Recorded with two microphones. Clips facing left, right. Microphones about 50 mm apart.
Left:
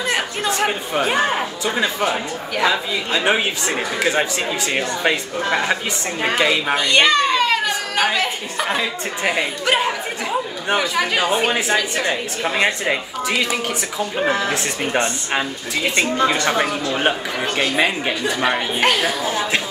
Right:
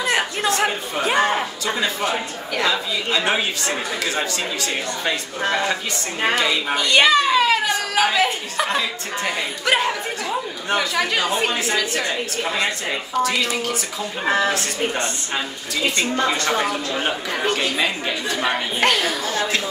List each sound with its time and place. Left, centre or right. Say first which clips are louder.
0.5 s speech: left 3 dB; centre
6.7 s a child's voice: right 2 dB; centre
12.0 s speech: left 2 dB; left
18.2 s speech: left 3 dB; centre
19.2 s speech: left 2 dB; centre